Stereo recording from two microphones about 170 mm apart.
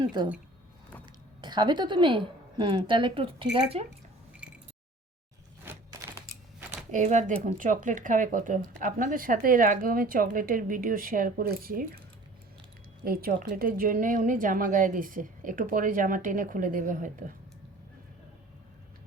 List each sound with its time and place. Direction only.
1.4 s a woman's voice: 25° right (ahead or behind)
4.4 s a sound: 5° right (ahead or behind)
6.9 s speech: 45° right (ahead or behind)
13.1 s speech: 55° right (ahead or behind)